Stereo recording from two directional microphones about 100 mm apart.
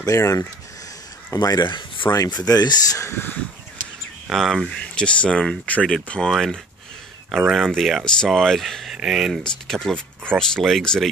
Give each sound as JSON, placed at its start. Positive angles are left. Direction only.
{"t": 0.0, "sound": "speech", "side_deg": 35}
{"t": 3.1, "sound": "a sound", "side_deg": 20}
{"t": 4.3, "sound": "speech", "side_deg": 0}
{"t": 7.2, "sound": "speech", "side_deg": -10}
{"t": 7.5, "sound": "speech", "side_deg": 0}